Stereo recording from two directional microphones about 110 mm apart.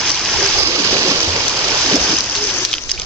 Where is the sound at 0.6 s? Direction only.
30° right (ahead or behind).